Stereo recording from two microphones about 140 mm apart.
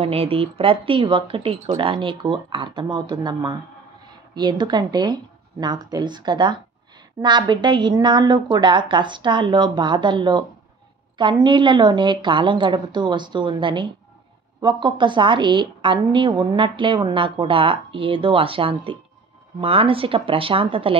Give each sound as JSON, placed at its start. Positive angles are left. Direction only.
{"t": 0.0, "sound": "a woman's voice", "side_deg": -45}